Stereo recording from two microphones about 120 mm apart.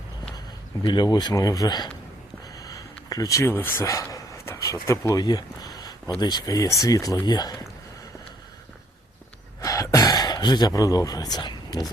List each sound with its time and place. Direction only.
0.8 s speech: 35° left (ahead or behind)
9.6 s gasp: 30° left (ahead or behind)